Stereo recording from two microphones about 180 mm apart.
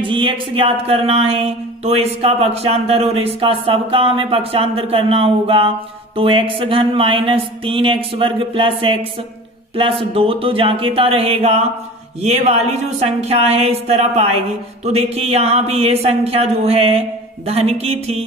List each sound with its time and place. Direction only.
0.0 s speech: 25° right (ahead or behind)